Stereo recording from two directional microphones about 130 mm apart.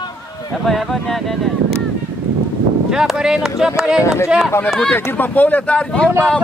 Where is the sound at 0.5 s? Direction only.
Centre (ahead or behind).